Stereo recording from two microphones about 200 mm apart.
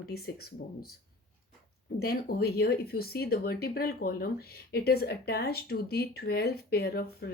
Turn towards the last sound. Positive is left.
turn(degrees=50)  # may be behind; listen again after turning